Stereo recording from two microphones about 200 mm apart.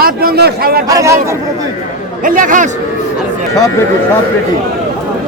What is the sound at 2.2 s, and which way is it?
Speech, 40° right (ahead or behind).